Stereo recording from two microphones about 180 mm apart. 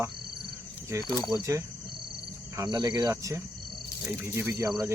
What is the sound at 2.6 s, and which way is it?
Speech, 20° right (ahead or behind).